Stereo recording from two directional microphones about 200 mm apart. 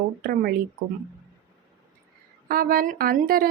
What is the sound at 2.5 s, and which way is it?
Speech, 45° right (ahead or behind).